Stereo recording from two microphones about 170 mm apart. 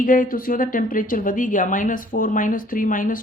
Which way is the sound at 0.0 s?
55° left (ahead or behind).